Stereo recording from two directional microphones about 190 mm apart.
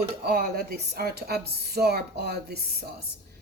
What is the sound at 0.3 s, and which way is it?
A woman's voice, 55° right (ahead or behind).